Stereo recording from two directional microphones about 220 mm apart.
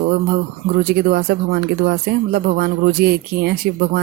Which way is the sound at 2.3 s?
45° right (ahead or behind).